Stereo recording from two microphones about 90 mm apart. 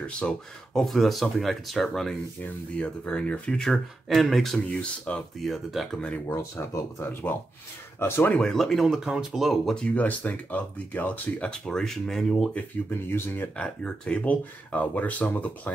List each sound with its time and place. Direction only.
0.2 s speech: 5° left (ahead or behind)
5.5 s speech: centre (ahead or behind)
5.9 s speech: 10° left (ahead or behind)
6.2 s speech: 30° left (ahead or behind)
8.4 s speech: 5° left (ahead or behind)
9.8 s speech: 15° left (ahead or behind)
11.6 s speech: 5° left (ahead or behind)
13.1 s speech: 20° left (ahead or behind)